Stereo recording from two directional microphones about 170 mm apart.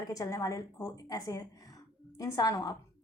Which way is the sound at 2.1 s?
20° left (ahead or behind).